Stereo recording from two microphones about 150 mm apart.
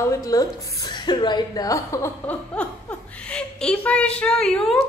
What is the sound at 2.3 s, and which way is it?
Speech, 10° left (ahead or behind).